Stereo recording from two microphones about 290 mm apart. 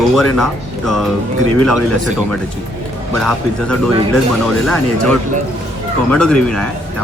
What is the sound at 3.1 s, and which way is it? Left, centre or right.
Speech, centre.